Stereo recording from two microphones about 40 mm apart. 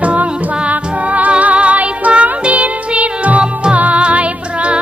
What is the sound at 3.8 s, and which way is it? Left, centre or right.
Music, right.